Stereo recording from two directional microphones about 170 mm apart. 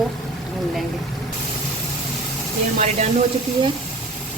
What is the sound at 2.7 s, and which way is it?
Speech, 45° right (ahead or behind).